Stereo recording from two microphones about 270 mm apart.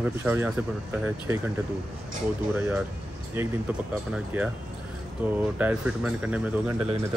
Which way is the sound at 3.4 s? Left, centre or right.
Centre.